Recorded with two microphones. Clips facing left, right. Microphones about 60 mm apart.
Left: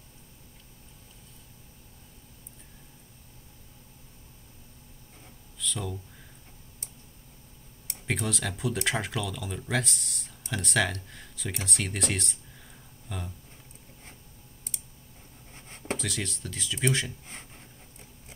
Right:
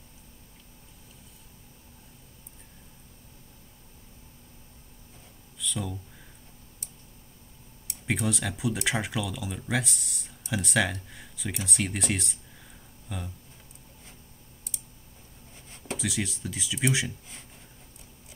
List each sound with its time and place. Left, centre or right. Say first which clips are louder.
5.6 s a sound: right 1 dB; centre
8.1 s speech: right 2 dB; centre
16.0 s speech: right 3 dB; centre